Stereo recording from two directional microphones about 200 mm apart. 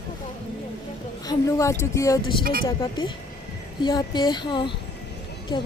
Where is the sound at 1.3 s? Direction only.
15° left (ahead or behind).